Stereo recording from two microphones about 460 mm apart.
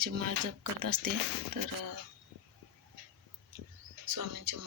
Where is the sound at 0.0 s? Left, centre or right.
Right.